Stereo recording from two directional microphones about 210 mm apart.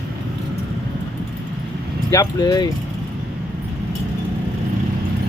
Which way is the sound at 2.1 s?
15° left (ahead or behind).